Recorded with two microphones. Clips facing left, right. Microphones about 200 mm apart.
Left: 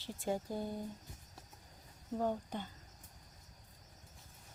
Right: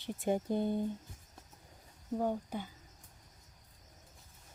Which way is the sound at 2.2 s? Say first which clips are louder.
Right 2 dB; 10° right (ahead or behind).